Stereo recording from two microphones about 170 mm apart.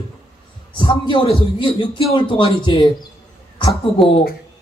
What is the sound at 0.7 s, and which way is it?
A man's voice, 30° left (ahead or behind).